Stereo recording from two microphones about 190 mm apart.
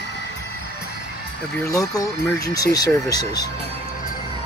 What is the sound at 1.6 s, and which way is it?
Speech, 15° left (ahead or behind).